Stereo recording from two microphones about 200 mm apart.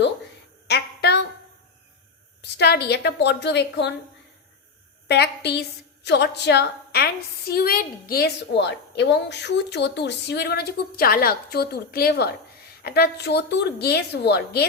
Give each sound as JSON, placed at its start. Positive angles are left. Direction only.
{"t": 0.7, "sound": "a sound", "side_deg": 55}
{"t": 2.4, "sound": "a woman's voice", "side_deg": 55}
{"t": 5.0, "sound": "a woman's voice", "side_deg": 55}